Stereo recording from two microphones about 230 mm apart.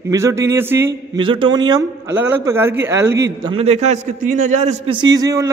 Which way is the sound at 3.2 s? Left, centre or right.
Right.